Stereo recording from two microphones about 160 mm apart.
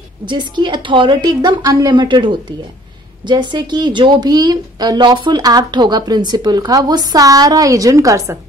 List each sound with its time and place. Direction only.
0.3 s a woman's voice: 30° right (ahead or behind)